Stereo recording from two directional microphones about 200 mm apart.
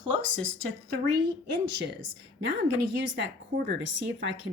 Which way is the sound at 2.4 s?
60° right (ahead or behind).